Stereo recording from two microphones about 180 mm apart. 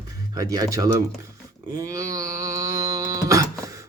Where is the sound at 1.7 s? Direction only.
20° right (ahead or behind).